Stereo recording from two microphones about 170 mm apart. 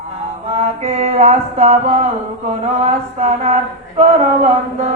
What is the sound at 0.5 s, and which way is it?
Mantra, 40° right (ahead or behind).